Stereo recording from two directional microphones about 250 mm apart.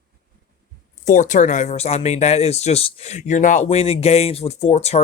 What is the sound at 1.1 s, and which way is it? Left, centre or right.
Speech, left.